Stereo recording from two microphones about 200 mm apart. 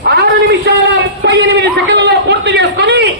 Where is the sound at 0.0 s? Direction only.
55° right (ahead or behind).